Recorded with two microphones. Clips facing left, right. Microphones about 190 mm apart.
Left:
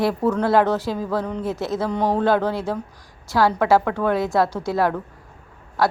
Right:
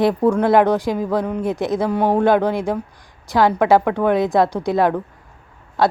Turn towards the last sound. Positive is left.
turn(degrees=-20)  # may be behind; listen again after turning